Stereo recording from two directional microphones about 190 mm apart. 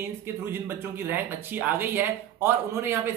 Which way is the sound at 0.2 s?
10° right (ahead or behind).